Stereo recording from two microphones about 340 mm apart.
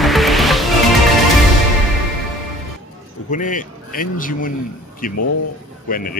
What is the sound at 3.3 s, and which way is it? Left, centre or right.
Speech, left.